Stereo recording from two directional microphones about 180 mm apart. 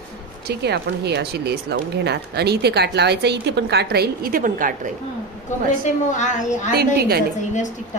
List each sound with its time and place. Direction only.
0.5 s speech: 65° right (ahead or behind); by 4.7 s 50° right (ahead or behind)
5.9 s a woman's voice: 40° left (ahead or behind)
6.7 s speech: 60° right (ahead or behind)